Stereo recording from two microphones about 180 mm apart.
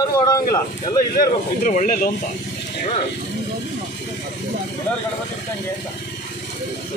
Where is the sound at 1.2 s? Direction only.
50° left (ahead or behind).